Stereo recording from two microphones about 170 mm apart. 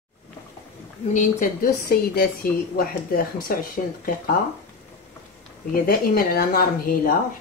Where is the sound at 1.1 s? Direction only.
55° left (ahead or behind).